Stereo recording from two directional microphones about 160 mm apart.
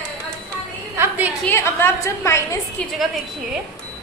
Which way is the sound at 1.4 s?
15° left (ahead or behind).